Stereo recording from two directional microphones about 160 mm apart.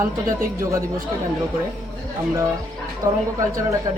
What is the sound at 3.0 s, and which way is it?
Speech, 20° right (ahead or behind).